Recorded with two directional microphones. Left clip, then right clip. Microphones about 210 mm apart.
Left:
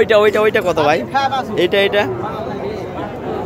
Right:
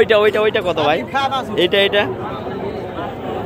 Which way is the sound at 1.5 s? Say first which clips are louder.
Even; centre (ahead or behind).